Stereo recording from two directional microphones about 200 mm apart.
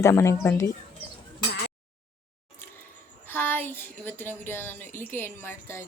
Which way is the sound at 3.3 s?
10° left (ahead or behind).